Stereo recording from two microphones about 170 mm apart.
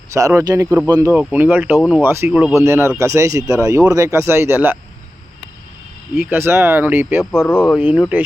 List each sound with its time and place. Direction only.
0.1 s speech: 20° right (ahead or behind)
1.3 s speech: 10° right (ahead or behind)
6.1 s speech: 15° right (ahead or behind)
7.3 s speech: 5° left (ahead or behind)
8.1 s speech: 10° right (ahead or behind)